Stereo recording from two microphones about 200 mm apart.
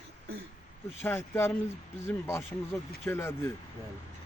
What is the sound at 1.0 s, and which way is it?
A man's voice, 10° left (ahead or behind).